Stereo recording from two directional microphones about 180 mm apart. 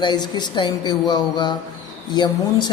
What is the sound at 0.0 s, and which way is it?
Speech, 25° left (ahead or behind).